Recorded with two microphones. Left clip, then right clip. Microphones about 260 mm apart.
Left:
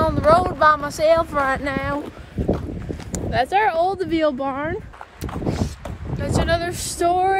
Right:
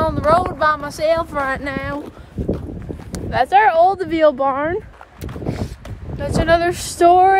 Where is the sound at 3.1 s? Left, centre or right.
Right.